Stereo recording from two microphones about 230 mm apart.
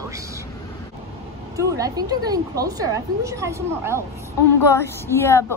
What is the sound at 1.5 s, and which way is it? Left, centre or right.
A woman's voice, centre.